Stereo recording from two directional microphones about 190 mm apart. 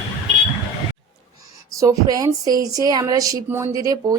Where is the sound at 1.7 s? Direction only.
20° right (ahead or behind).